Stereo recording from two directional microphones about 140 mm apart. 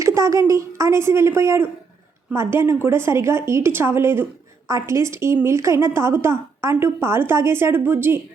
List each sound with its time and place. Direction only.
0.0 s a woman's voice: 20° right (ahead or behind)